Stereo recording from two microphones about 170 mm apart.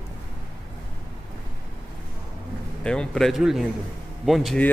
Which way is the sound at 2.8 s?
5° left (ahead or behind).